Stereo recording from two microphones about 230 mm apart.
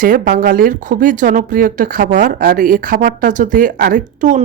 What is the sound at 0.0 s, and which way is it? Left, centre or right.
Speech, right.